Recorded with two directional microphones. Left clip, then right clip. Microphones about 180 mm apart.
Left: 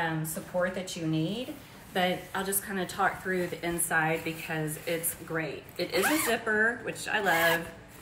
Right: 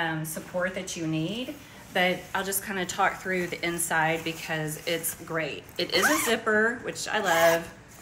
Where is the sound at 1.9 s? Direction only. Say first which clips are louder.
Right 4 dB; 20° right (ahead or behind).